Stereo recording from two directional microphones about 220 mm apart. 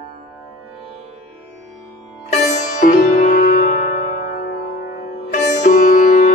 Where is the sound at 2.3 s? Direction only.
35° left (ahead or behind).